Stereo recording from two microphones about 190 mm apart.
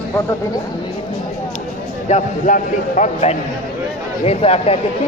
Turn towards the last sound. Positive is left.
turn(degrees=30)  # may be behind; listen again after turning